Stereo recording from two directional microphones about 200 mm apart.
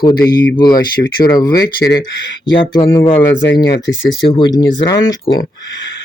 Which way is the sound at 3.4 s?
60° left (ahead or behind).